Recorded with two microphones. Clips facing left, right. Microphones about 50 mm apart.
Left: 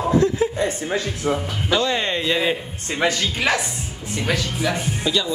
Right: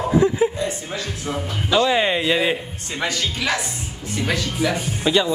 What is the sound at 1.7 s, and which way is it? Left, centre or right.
Speech, centre.